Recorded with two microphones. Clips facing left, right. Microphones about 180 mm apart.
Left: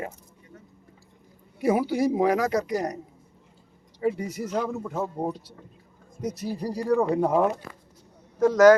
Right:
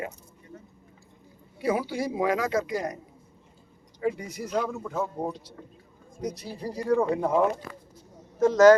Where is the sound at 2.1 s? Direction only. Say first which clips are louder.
Even; 40° left (ahead or behind).